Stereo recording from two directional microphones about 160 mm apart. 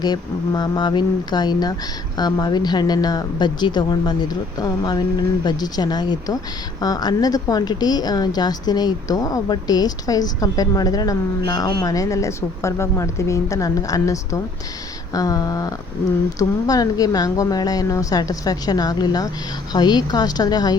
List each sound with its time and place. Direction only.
0.0 s a woman's voice: 25° left (ahead or behind)